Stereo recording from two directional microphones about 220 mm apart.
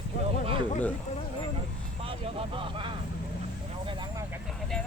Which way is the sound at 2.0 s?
25° right (ahead or behind).